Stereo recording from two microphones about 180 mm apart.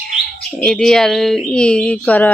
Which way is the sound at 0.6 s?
Centre (ahead or behind).